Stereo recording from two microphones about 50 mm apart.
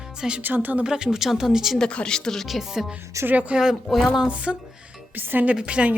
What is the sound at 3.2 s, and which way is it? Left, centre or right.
Speech, right.